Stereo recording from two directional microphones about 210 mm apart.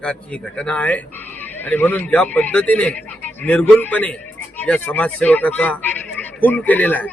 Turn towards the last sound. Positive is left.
turn(degrees=10)  # may be behind; listen again after turning